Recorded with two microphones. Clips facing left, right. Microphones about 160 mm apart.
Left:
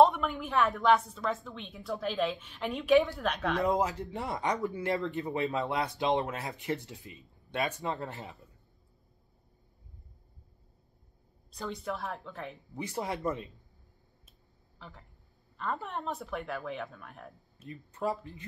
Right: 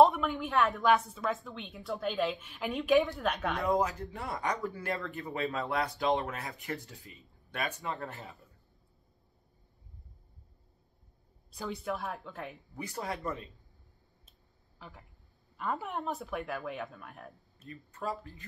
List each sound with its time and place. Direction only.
0.0 s a woman's voice: centre (ahead or behind)
3.6 s speech: 25° left (ahead or behind)
11.5 s a woman's voice: 5° right (ahead or behind)
12.7 s speech: 20° left (ahead or behind)
14.8 s a woman's voice: 5° right (ahead or behind)
17.6 s speech: 20° left (ahead or behind)